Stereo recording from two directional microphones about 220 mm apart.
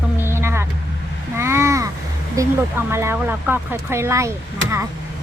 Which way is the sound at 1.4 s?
10° right (ahead or behind).